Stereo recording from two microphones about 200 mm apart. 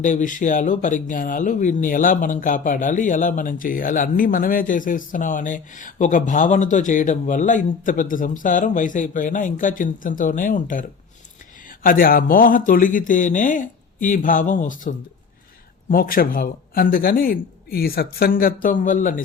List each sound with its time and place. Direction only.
0.0 s a man's voice: 40° left (ahead or behind)